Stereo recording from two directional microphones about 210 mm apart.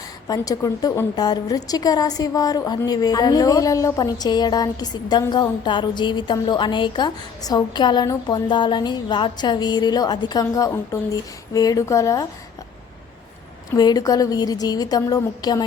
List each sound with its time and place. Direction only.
0.3 s a woman's voice: 15° left (ahead or behind)
13.7 s a woman's voice: 20° left (ahead or behind)